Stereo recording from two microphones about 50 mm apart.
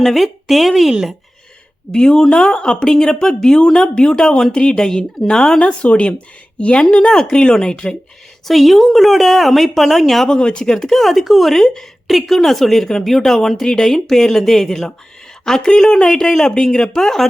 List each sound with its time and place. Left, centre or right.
0.0 s speech: centre
1.9 s speech: centre
8.4 s speech: centre
10.2 s speech: centre